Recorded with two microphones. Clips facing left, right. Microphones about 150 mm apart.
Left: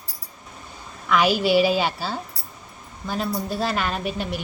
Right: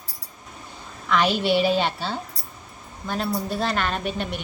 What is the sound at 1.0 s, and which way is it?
A woman's voice, 5° left (ahead or behind).